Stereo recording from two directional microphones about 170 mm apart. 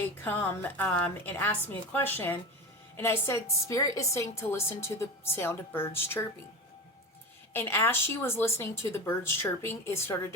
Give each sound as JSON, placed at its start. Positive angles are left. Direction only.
{"t": 0.2, "sound": "a woman's voice", "side_deg": 10}
{"t": 7.5, "sound": "a woman's voice", "side_deg": 10}